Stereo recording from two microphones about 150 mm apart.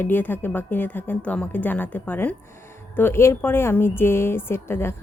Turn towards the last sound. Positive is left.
turn(degrees=15)  # may be behind; listen again after turning